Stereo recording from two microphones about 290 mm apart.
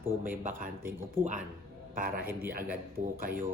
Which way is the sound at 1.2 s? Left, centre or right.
Centre.